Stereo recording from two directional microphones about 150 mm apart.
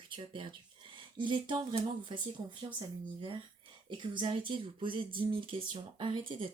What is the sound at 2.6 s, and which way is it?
Speech, 35° right (ahead or behind).